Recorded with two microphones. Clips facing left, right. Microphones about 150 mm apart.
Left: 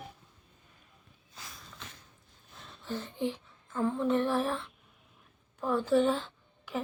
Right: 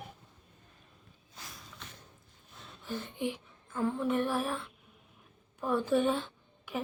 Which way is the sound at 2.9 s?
15° right (ahead or behind).